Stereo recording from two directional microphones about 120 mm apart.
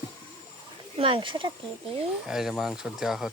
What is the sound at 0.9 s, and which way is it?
Speech, 50° right (ahead or behind).